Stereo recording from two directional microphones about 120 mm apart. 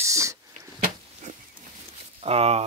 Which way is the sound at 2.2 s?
55° right (ahead or behind).